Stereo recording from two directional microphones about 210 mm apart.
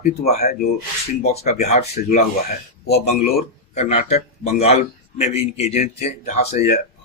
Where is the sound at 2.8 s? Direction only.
50° left (ahead or behind).